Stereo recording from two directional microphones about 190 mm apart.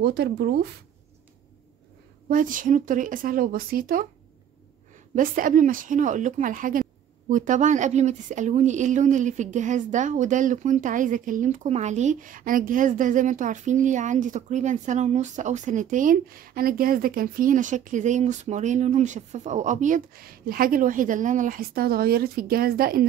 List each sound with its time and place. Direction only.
0.0 s speech: 60° right (ahead or behind)
2.2 s speech: 45° right (ahead or behind)
5.1 s a woman's voice: 45° right (ahead or behind)